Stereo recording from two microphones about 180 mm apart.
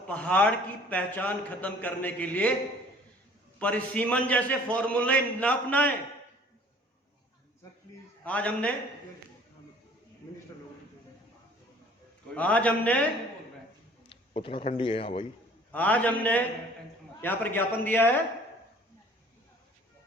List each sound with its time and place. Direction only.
0.1 s a man's voice: 5° left (ahead or behind)
3.6 s a man's voice: 10° left (ahead or behind)
8.2 s a man's voice: 5° left (ahead or behind)
10.2 s a sound: 20° left (ahead or behind)
12.3 s a man's voice: 5° left (ahead or behind)
14.1 s a man's voice: 30° left (ahead or behind)
15.7 s a man's voice: 10° left (ahead or behind)